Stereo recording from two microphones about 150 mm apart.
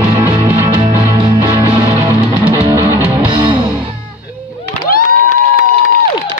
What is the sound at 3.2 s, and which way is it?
Music, 35° right (ahead or behind).